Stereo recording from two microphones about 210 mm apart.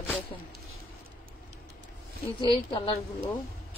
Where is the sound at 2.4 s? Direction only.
25° left (ahead or behind).